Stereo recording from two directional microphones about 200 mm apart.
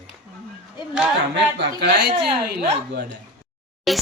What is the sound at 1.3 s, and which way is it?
A woman's voice, 55° right (ahead or behind).